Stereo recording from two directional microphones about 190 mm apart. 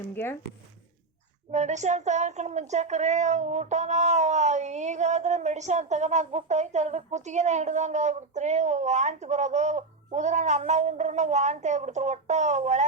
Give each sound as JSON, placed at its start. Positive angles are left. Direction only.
{"t": 1.5, "sound": "speech", "side_deg": -35}